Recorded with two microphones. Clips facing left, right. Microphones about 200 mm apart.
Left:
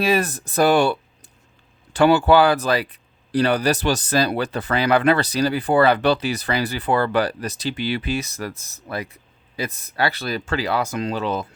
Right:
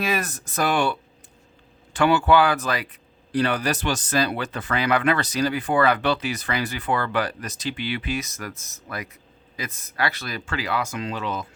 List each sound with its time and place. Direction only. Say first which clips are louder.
0.0 s speech: left 6 dB; 30° left (ahead or behind)